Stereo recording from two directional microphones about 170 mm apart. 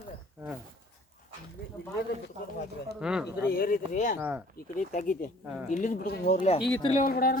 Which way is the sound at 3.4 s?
60° left (ahead or behind).